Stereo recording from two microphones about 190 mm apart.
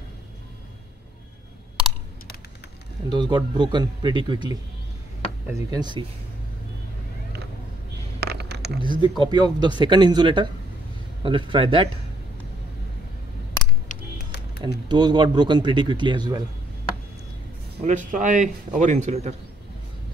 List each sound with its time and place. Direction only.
3.1 s a man's voice: 20° right (ahead or behind)
5.5 s a man's voice: 20° right (ahead or behind)
8.2 s a sound: 60° right (ahead or behind)
8.8 s a man's voice: 25° right (ahead or behind)
13.8 s a sound: 55° left (ahead or behind)
14.9 s a man's voice: 25° right (ahead or behind)
17.7 s speech: 40° right (ahead or behind)